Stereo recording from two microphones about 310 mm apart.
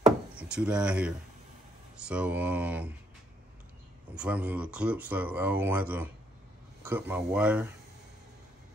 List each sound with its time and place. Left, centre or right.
0.0 s wood: centre
2.0 s speech: centre
4.1 s speech: centre